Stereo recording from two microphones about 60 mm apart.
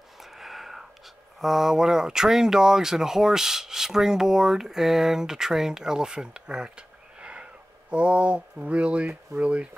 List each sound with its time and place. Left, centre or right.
0.2 s gasp: centre
1.4 s speech: centre
7.2 s wheeze: centre
7.9 s speech: right